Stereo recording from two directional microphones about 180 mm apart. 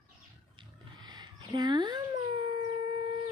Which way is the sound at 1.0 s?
25° right (ahead or behind).